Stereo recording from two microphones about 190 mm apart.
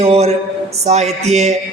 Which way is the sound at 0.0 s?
35° right (ahead or behind).